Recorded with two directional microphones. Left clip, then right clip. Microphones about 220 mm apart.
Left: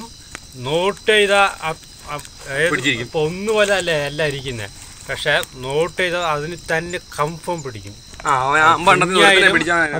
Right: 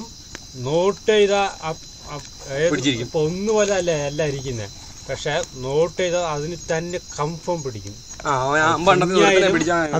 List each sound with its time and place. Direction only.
0.7 s speech: 10° right (ahead or behind)
2.7 s speech: 30° right (ahead or behind)
3.1 s speech: 10° right (ahead or behind)
8.2 s speech: 30° right (ahead or behind)
9.1 s speech: centre (ahead or behind)
9.6 s speech: 25° right (ahead or behind)